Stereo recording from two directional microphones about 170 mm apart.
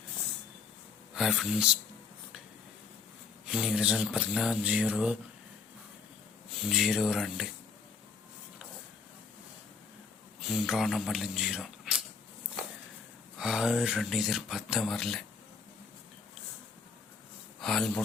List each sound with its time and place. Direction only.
1.1 s speech: 5° right (ahead or behind)
3.4 s speech: 5° right (ahead or behind)
6.6 s speech: centre (ahead or behind)
10.4 s speech: centre (ahead or behind)
13.4 s speech: 5° right (ahead or behind)
17.6 s speech: centre (ahead or behind)